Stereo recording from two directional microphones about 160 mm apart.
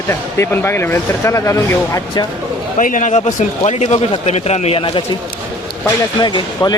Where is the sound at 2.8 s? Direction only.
50° left (ahead or behind); by 5.0 s 35° left (ahead or behind).